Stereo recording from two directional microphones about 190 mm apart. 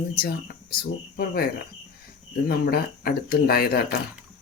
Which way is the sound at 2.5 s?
50° left (ahead or behind).